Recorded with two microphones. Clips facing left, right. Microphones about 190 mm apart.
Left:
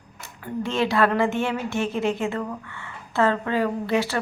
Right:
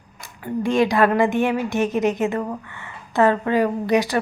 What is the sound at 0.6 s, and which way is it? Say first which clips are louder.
A woman's voice: right 4 dB; 15° right (ahead or behind).